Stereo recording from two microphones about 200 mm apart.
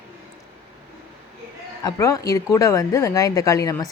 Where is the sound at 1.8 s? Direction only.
15° left (ahead or behind).